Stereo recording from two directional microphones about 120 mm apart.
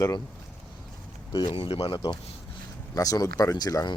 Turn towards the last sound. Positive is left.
turn(degrees=35)  # may be behind; listen again after turning